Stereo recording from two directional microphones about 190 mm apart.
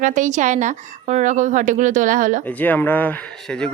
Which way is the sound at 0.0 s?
40° right (ahead or behind).